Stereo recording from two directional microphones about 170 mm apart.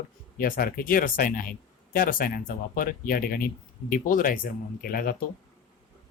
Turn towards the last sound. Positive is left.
turn(degrees=60)  # may be behind; listen again after turning